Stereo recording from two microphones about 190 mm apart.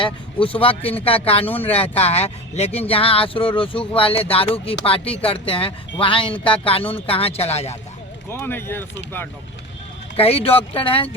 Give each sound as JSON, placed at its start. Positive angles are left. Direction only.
{"t": 0.0, "sound": "speech", "side_deg": 30}
{"t": 8.3, "sound": "speech", "side_deg": 10}
{"t": 10.2, "sound": "speech", "side_deg": 30}